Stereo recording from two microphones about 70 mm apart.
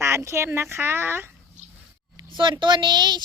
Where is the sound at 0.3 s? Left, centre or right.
Right.